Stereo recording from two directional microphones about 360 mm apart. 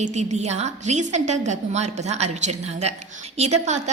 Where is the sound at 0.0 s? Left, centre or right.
Centre.